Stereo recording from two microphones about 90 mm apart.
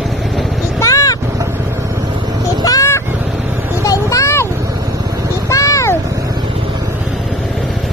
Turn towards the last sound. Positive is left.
turn(degrees=35)  # may be behind; listen again after turning